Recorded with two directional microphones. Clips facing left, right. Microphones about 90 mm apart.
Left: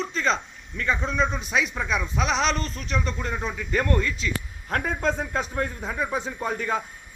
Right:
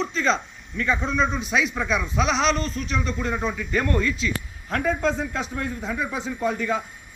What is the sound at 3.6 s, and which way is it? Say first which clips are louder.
A man's voice: right 1 dB; 35° left (ahead or behind).